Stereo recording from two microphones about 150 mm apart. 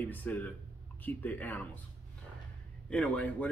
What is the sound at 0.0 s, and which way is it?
Speech, 10° left (ahead or behind).